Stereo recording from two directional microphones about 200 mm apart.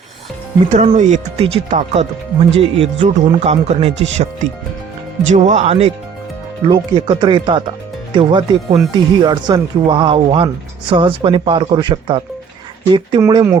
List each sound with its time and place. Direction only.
0.7 s speech: 35° right (ahead or behind); by 13.6 s 15° right (ahead or behind)